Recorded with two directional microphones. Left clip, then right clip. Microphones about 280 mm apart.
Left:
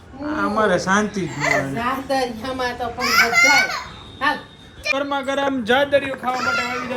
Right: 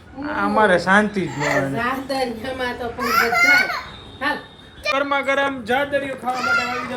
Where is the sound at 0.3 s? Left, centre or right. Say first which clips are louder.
Right 2 dB; centre.